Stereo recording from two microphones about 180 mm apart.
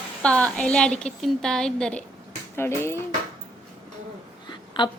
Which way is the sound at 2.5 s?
15° left (ahead or behind).